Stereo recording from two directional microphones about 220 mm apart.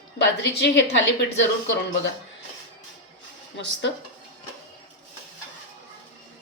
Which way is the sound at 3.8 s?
55° left (ahead or behind).